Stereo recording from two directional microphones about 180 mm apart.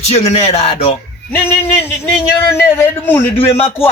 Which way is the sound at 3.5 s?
35° left (ahead or behind).